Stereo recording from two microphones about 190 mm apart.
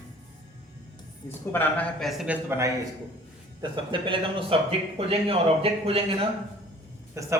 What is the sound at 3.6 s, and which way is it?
Speech, 25° right (ahead or behind).